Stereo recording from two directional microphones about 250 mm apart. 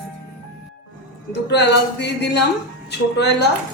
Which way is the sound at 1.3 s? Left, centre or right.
Left.